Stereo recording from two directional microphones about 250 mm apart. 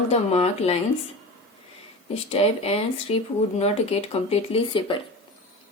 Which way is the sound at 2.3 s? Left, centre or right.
Left.